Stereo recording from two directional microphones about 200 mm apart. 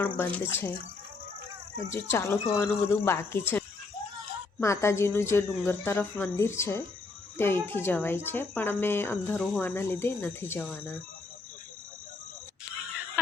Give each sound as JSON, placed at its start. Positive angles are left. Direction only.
{"t": 0.2, "sound": "speech", "side_deg": 10}
{"t": 1.9, "sound": "speech", "side_deg": 10}
{"t": 4.6, "sound": "a woman's voice", "side_deg": 15}